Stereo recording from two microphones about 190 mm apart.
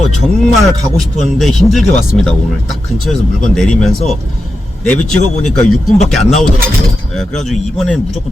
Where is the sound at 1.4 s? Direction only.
Centre (ahead or behind).